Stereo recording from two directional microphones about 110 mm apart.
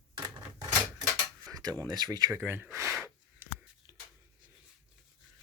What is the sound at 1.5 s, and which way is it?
Tick-tock, 35° right (ahead or behind).